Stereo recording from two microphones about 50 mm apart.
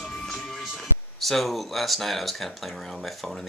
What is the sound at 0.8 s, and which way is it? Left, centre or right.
Speech, centre.